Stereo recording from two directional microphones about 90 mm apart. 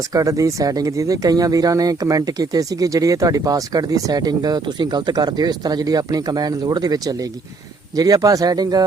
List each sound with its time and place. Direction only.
0.1 s speech: 40° right (ahead or behind)